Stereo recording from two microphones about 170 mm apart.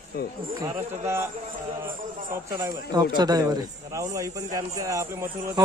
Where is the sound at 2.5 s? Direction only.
15° right (ahead or behind).